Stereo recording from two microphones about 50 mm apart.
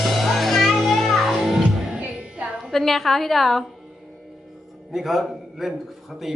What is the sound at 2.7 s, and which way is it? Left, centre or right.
Speech, centre.